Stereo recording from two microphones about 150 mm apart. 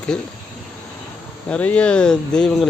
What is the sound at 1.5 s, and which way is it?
Speech, 10° left (ahead or behind).